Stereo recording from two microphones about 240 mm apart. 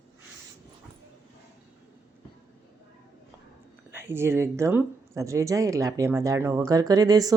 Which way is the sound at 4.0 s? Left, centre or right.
Centre.